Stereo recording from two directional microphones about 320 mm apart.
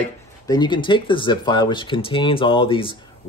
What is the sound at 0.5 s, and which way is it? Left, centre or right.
Speech, centre.